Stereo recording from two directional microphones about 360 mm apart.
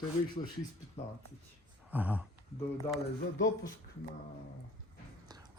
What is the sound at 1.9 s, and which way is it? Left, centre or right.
Speech, centre.